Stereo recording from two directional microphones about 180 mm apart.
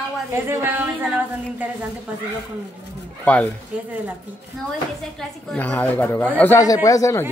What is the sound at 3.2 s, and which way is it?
Speech, 5° left (ahead or behind).